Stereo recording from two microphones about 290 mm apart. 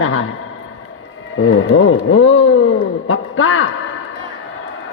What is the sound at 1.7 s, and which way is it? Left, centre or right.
A man's voice, left.